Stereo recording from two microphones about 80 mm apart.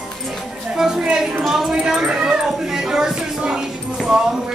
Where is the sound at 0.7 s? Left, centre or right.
Centre.